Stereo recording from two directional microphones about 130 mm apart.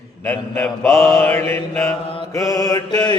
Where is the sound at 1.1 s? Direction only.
15° left (ahead or behind).